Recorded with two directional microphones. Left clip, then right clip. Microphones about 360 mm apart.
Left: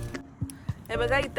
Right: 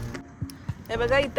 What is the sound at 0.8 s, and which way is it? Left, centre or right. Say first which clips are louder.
Speech: right 3 dB; centre.